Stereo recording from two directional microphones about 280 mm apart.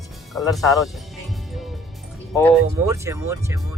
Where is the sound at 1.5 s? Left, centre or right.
Centre.